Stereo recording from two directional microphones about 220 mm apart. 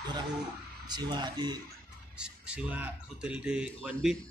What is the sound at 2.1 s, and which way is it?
A man's voice, 5° right (ahead or behind).